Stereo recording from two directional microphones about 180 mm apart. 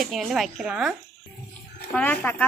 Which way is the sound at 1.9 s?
10° left (ahead or behind).